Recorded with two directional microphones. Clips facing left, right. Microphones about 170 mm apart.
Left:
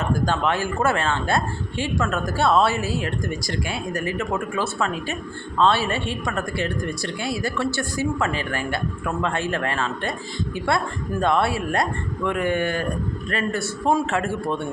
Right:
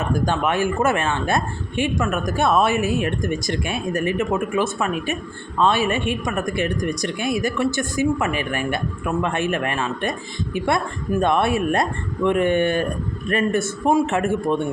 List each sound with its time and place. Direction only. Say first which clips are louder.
0.1 s a woman's voice: right 1 dB; 20° right (ahead or behind)